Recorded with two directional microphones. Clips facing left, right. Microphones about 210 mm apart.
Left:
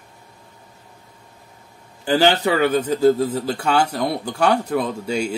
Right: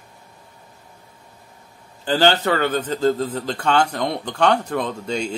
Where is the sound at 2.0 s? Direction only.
10° left (ahead or behind).